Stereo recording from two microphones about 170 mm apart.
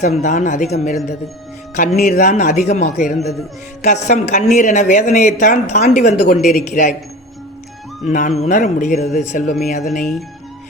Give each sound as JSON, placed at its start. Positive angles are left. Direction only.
{"t": 0.2, "sound": "a woman's voice", "side_deg": 50}
{"t": 8.0, "sound": "a woman's voice", "side_deg": 45}
{"t": 9.9, "sound": "speech", "side_deg": 0}